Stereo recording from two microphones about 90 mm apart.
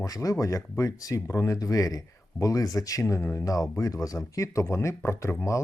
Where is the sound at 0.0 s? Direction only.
40° left (ahead or behind).